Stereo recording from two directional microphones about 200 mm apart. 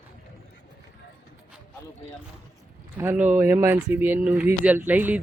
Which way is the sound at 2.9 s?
10° right (ahead or behind).